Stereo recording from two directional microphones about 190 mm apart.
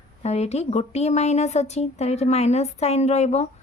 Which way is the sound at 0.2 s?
35° left (ahead or behind).